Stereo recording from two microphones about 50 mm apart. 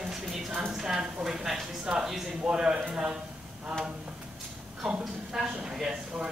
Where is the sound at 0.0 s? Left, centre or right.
Centre.